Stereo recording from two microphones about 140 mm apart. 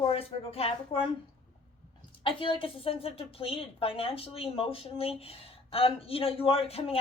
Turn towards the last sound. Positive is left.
turn(degrees=45)  # may be behind; listen again after turning